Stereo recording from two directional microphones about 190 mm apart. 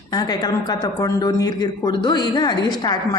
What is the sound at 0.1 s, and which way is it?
Speech, 20° left (ahead or behind).